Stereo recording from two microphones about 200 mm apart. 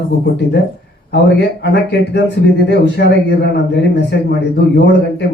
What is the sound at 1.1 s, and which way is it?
Speech, 60° left (ahead or behind).